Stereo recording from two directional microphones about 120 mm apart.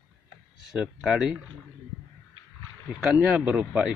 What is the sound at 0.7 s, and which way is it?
Speech, 5° right (ahead or behind).